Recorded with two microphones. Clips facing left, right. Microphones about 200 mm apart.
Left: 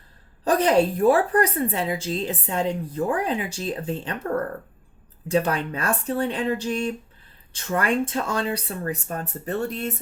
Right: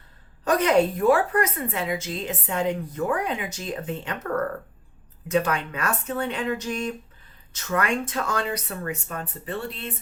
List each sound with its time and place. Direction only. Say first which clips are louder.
0.4 s a woman's voice: left 1 dB; 30° left (ahead or behind)
5.3 s a woman's voice: left 1 dB; 35° left (ahead or behind)